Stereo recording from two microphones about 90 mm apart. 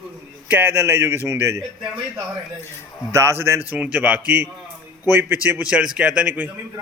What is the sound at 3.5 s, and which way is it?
A man's voice, 15° right (ahead or behind).